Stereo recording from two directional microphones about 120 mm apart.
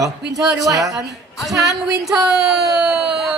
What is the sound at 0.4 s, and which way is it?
A woman's voice, 10° right (ahead or behind).